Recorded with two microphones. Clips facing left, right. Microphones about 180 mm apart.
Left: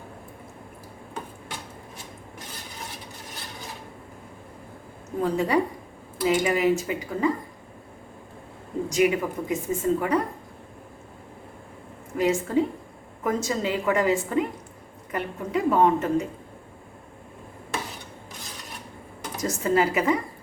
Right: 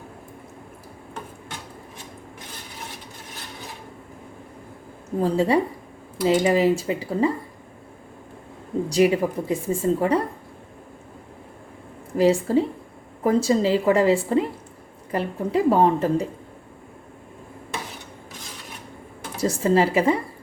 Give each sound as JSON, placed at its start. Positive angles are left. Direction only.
{"t": 5.2, "sound": "speech", "side_deg": -30}
{"t": 8.9, "sound": "a woman's voice", "side_deg": -30}
{"t": 12.1, "sound": "a woman's voice", "side_deg": -35}
{"t": 19.4, "sound": "speech", "side_deg": -30}